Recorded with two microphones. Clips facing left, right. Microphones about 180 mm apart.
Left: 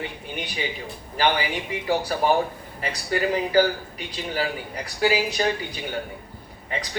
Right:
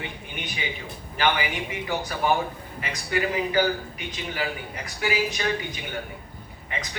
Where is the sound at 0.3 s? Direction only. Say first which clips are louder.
Left 4 dB; 35° left (ahead or behind).